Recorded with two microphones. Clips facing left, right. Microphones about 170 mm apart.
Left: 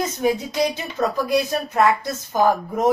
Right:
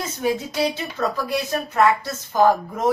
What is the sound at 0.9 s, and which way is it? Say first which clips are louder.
A woman's voice: left 4 dB; 15° left (ahead or behind).